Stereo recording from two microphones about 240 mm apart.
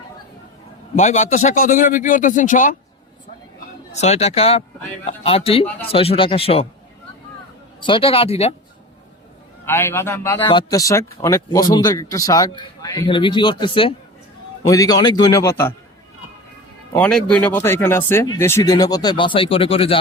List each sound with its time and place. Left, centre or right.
0.9 s a man's voice: left
3.9 s speech: left
7.8 s speech: left
9.6 s a man's voice: centre
16.9 s a man's voice: centre; by 20.0 s left